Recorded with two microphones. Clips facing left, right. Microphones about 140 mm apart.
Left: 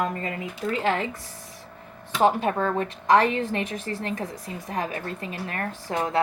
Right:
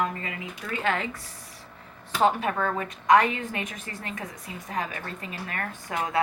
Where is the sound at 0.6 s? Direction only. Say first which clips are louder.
Left 4 dB; 25° left (ahead or behind).